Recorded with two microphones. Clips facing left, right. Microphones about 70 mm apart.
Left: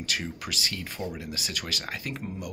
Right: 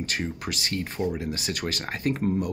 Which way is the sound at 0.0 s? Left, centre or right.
Right.